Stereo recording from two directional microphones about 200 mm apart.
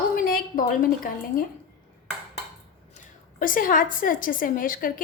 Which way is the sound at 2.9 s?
45° left (ahead or behind).